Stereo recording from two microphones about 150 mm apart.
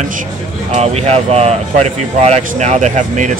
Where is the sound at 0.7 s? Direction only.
45° right (ahead or behind).